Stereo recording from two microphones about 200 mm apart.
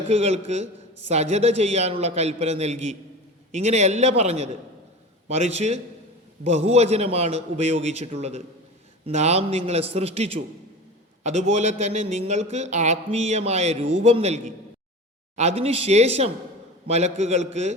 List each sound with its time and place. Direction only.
0.1 s a man's voice: 30° right (ahead or behind)